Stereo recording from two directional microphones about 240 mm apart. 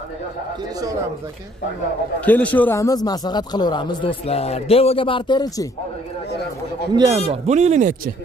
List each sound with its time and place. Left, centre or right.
2.2 s a man's voice: centre
6.9 s a man's voice: centre
7.4 s speech: right